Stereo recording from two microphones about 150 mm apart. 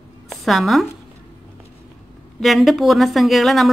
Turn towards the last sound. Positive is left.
turn(degrees=0)  # may be behind; listen again after turning